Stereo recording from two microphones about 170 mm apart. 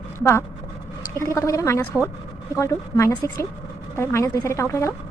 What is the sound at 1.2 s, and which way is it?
A woman's voice, 20° left (ahead or behind).